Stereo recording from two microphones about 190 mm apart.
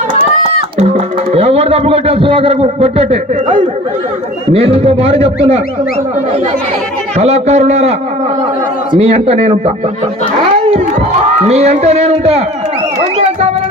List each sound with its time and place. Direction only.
0.4 s speech: 30° right (ahead or behind)
7.2 s speech: 35° right (ahead or behind)
9.0 s speech: 30° right (ahead or behind)
10.4 s a sound: 30° right (ahead or behind)
11.4 s speech: 35° right (ahead or behind)